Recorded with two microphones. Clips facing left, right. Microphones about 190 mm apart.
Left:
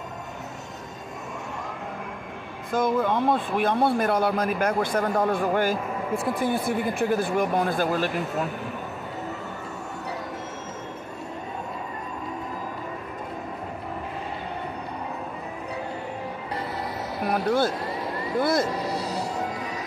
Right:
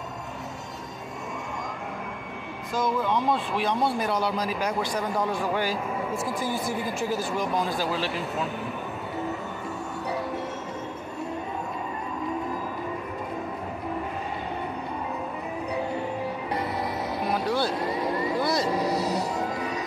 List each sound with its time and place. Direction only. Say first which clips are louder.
2.7 s speech: left 3 dB; 55° left (ahead or behind)
17.3 s speech: left 4 dB; 50° left (ahead or behind)
18.8 s music: right 3 dB; 25° right (ahead or behind)